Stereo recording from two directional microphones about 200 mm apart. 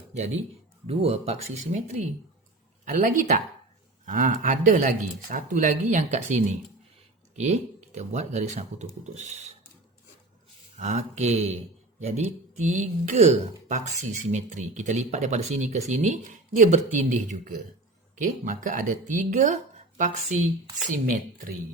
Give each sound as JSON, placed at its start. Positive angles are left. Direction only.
{"t": 0.9, "sound": "speech", "side_deg": -30}
{"t": 10.8, "sound": "speech", "side_deg": -35}